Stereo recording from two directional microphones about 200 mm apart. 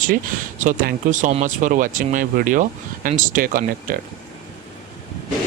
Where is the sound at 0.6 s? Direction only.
45° right (ahead or behind).